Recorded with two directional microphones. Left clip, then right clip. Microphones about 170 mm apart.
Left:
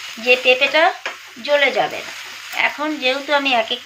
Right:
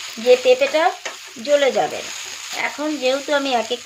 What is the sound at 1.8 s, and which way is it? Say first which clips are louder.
Speech: left 1 dB; 65° right (ahead or behind).